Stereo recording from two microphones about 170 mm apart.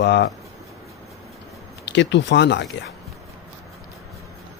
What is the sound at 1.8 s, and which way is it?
Speech, 90° left.